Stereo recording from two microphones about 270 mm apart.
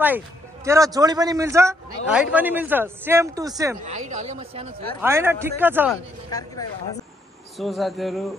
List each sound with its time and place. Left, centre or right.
0.7 s a man's voice: centre
3.8 s speech: right
5.0 s a man's voice: centre
7.5 s speech: centre